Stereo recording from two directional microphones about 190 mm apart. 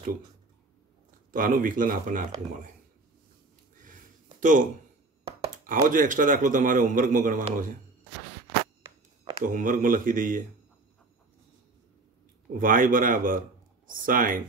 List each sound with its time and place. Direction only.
1.3 s a man's voice: 45° right (ahead or behind)
4.4 s speech: 45° right (ahead or behind)
5.7 s a man's voice: 45° right (ahead or behind)
9.4 s a man's voice: 45° right (ahead or behind)
12.5 s a man's voice: 45° right (ahead or behind)